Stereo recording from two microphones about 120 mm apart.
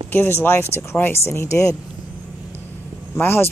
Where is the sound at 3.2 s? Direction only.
20° left (ahead or behind).